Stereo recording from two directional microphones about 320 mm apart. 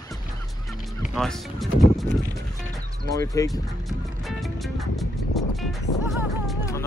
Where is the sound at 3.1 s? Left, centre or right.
Centre.